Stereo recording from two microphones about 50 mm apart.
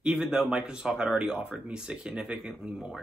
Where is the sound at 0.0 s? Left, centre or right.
Centre.